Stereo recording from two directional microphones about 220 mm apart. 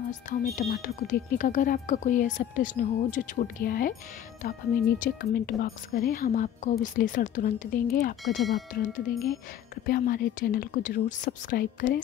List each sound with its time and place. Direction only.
0.1 s speech: 35° left (ahead or behind)
8.4 s speech: centre (ahead or behind)
9.8 s speech: 40° left (ahead or behind)